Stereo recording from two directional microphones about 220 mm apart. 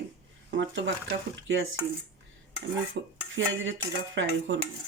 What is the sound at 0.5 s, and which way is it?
Speech, 55° right (ahead or behind).